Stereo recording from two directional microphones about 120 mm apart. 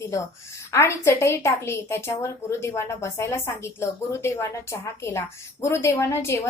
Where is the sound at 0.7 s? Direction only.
20° left (ahead or behind).